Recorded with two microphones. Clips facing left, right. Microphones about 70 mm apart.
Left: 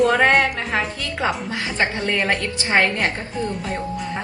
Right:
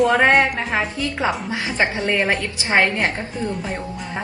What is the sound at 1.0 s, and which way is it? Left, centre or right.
A woman's voice, right.